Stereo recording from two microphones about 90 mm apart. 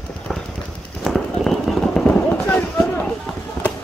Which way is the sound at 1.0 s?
Centre (ahead or behind).